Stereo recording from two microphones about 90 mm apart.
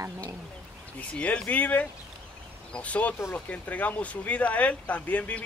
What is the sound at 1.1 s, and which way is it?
Speech, 15° left (ahead or behind).